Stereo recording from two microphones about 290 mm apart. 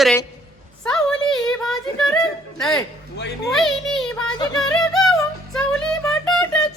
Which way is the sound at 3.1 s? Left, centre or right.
Left.